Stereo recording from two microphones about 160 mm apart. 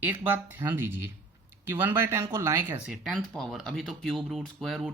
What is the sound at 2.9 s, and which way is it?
Speech, centre (ahead or behind).